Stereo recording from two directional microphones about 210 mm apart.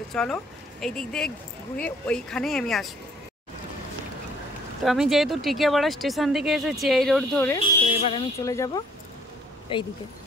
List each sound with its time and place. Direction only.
0.1 s speech: 5° left (ahead or behind)
4.8 s speech: centre (ahead or behind)
7.5 s speech: 25° left (ahead or behind)
8.5 s speech: 15° left (ahead or behind)